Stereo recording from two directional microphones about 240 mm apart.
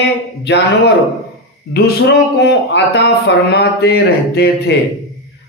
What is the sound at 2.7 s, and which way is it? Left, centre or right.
A man's voice, left.